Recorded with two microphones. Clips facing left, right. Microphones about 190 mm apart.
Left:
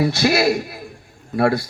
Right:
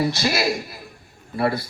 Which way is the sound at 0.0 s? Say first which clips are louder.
Left 5 dB; 65° left (ahead or behind).